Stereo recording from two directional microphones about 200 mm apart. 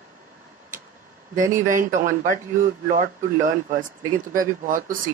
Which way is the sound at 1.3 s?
40° right (ahead or behind).